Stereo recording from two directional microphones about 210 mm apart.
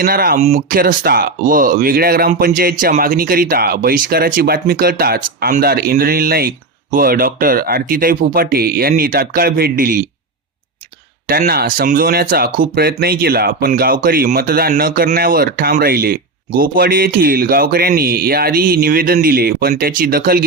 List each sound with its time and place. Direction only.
0.0 s speech: 45° right (ahead or behind)
11.3 s speech: 45° right (ahead or behind)